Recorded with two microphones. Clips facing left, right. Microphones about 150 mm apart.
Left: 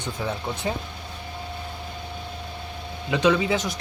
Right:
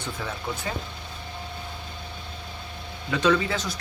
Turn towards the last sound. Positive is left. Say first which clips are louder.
# left 2 dB
turn(degrees=20)  # may be behind; listen again after turning